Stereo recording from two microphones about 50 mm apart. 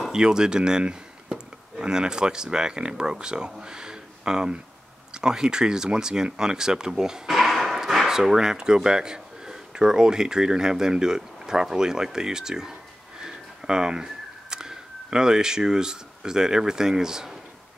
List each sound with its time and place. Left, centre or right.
0.1 s speech: centre
7.2 s speech: centre